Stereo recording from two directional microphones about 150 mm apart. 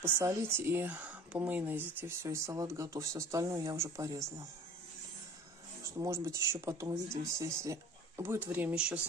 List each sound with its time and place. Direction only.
0.0 s speech: 20° right (ahead or behind)
5.9 s speech: 20° right (ahead or behind)